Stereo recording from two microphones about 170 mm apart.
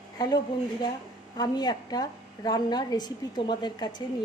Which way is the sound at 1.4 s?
25° left (ahead or behind).